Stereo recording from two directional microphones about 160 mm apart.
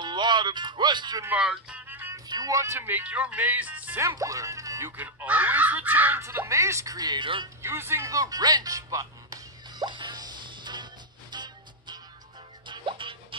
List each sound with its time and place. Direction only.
0.0 s speech: 30° right (ahead or behind)
1.2 s music: 5° right (ahead or behind)
2.2 s speech: 25° right (ahead or behind)
7.6 s music: 15° right (ahead or behind); by 13.4 s 30° right (ahead or behind)